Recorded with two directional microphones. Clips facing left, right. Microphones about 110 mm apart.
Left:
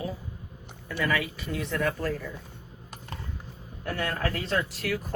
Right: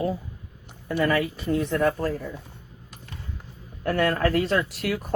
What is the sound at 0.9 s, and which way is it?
Speech, 40° right (ahead or behind).